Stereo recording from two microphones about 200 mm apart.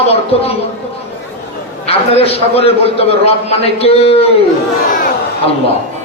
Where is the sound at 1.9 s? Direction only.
30° left (ahead or behind).